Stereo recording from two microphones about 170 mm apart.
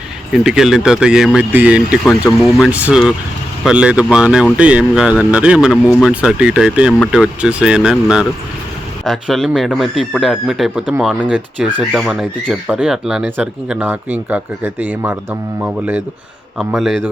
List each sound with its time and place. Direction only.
0.3 s speech: 5° right (ahead or behind)